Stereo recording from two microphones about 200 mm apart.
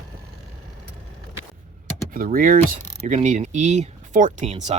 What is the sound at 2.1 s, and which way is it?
Speech, 45° right (ahead or behind).